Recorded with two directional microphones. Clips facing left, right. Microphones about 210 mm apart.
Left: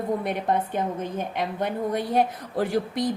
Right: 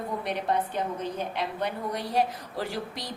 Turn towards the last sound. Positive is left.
turn(degrees=50)  # may be behind; listen again after turning